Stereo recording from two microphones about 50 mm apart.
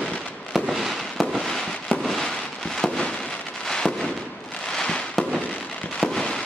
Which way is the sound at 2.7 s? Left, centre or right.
Centre.